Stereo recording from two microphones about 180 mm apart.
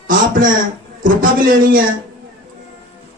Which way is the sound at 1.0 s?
50° right (ahead or behind).